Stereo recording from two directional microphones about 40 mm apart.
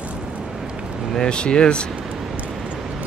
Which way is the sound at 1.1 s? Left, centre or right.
Centre.